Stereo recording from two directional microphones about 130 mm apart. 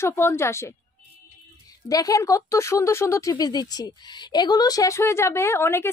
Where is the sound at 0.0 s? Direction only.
20° left (ahead or behind).